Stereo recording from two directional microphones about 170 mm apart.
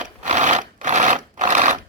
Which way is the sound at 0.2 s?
45° right (ahead or behind).